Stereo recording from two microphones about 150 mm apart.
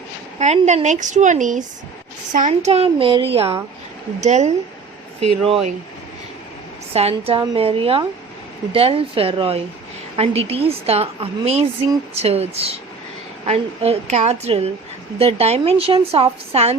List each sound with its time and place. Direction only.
0.3 s a woman's voice: 50° right (ahead or behind)
6.9 s a woman's voice: 40° right (ahead or behind)